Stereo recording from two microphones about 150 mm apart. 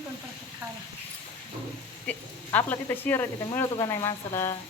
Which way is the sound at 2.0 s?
10° left (ahead or behind).